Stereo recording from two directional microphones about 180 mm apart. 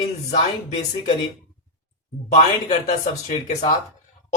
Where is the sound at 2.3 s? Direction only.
40° left (ahead or behind).